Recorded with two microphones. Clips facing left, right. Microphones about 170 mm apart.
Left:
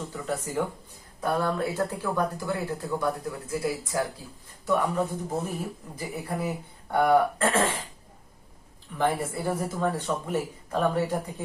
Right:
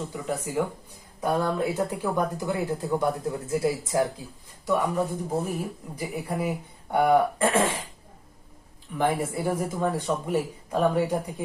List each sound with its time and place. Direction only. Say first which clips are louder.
0.1 s speech: right 1 dB; 10° right (ahead or behind)
4.6 s speech: right 1 dB; 15° right (ahead or behind)
9.0 s speech: right 1 dB; 10° right (ahead or behind)